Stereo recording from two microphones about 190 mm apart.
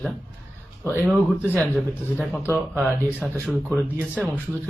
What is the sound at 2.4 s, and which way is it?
Speech, 10° right (ahead or behind).